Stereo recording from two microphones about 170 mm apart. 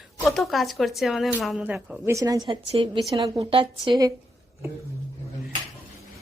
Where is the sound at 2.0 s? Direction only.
20° right (ahead or behind).